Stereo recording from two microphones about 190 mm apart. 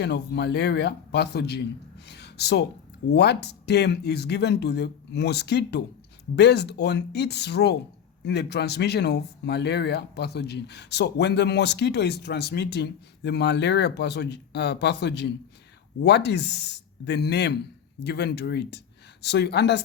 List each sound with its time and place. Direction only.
0.0 s speech: 65° left (ahead or behind)